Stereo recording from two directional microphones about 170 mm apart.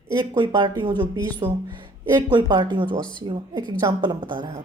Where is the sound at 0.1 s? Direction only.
25° right (ahead or behind).